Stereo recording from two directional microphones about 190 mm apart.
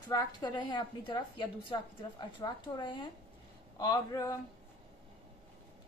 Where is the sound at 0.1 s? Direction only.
20° left (ahead or behind).